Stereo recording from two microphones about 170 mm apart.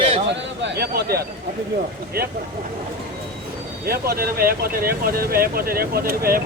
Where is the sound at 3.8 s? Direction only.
65° right (ahead or behind).